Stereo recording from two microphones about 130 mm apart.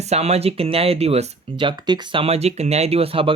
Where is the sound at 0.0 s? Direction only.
55° right (ahead or behind).